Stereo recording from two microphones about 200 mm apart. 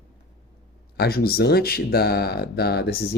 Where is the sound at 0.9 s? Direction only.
50° left (ahead or behind).